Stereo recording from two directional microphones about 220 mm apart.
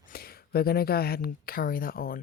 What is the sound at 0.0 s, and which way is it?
Speech, 45° left (ahead or behind).